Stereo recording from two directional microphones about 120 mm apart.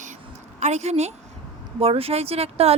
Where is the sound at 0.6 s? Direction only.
65° right (ahead or behind).